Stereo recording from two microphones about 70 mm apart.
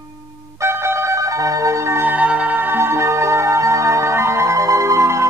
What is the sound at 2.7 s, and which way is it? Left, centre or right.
Music, right.